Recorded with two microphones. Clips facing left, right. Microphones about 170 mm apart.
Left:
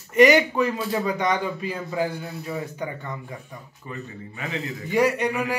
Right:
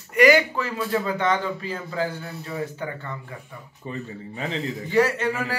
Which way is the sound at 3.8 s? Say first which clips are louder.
Right 4 dB; 30° right (ahead or behind).